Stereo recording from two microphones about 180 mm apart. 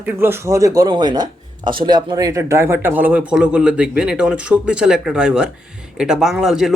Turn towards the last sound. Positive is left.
turn(degrees=-5)  # may be behind; listen again after turning